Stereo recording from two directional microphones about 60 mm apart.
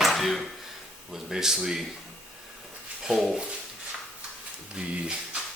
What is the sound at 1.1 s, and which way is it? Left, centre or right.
Speech, centre.